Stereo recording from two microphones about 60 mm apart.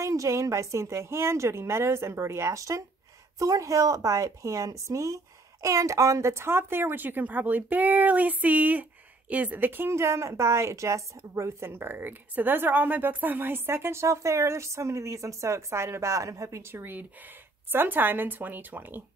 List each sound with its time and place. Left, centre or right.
0.0 s a woman's voice: right
6.3 s a woman's voice: right
11.7 s a woman's voice: right
16.7 s speech: right